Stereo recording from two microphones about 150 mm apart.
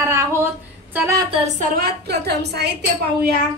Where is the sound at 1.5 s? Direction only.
85° right.